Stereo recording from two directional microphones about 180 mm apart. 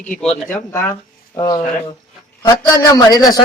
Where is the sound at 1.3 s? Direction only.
20° left (ahead or behind).